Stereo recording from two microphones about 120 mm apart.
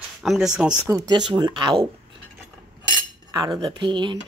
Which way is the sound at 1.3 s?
40° right (ahead or behind).